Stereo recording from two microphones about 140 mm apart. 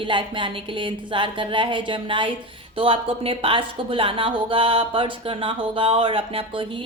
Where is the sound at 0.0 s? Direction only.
35° right (ahead or behind).